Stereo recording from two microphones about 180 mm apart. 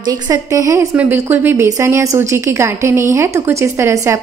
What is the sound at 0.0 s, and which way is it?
A woman's voice, 20° right (ahead or behind).